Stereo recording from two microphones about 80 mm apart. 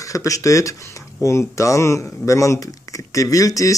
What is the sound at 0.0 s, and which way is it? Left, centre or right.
Speech, left.